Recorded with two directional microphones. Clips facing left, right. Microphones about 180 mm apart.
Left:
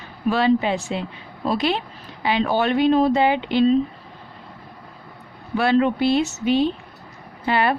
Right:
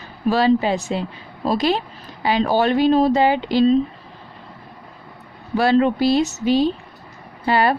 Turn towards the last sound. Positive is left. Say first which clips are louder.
# right 3 dB
turn(degrees=-35)  # may be behind; listen again after turning